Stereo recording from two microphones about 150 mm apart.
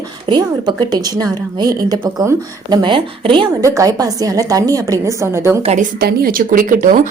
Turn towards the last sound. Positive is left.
turn(degrees=-65)  # may be behind; listen again after turning